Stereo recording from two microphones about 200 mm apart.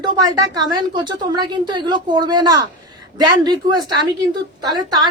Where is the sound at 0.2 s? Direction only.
20° right (ahead or behind).